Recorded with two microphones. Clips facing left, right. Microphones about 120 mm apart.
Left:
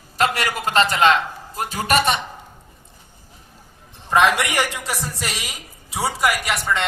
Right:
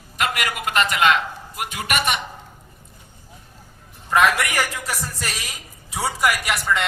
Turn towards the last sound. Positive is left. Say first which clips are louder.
# even
turn(degrees=0)  # may be behind; listen again after turning